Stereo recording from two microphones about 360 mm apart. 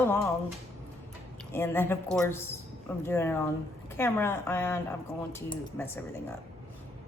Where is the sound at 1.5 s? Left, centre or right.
Centre.